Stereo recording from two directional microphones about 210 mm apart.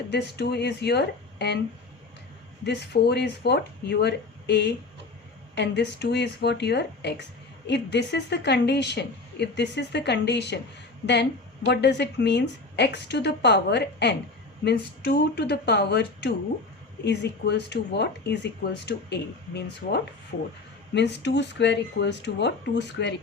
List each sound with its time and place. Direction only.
0.1 s a woman's voice: 55° left (ahead or behind)
2.6 s a woman's voice: 55° left (ahead or behind)